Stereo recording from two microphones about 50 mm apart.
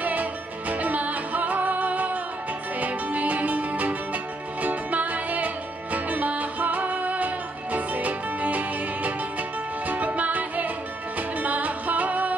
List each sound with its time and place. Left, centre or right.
0.0 s music: right